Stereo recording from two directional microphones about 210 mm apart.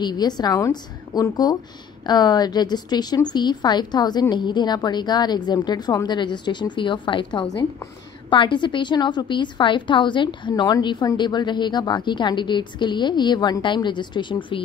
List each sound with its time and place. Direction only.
0.0 s a woman's voice: 20° left (ahead or behind)